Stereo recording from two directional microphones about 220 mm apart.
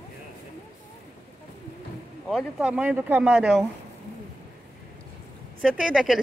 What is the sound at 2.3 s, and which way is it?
Speech, centre (ahead or behind).